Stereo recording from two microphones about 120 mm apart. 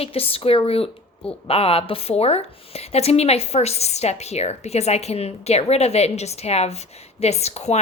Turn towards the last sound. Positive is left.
turn(degrees=65)  # may be behind; listen again after turning